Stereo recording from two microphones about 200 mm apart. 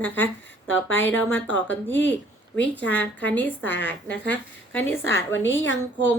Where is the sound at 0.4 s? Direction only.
70° left (ahead or behind).